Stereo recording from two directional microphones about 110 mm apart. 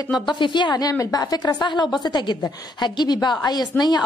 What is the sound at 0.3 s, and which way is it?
A woman's voice, 45° left (ahead or behind).